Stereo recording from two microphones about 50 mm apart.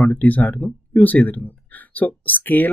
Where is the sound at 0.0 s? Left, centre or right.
Left.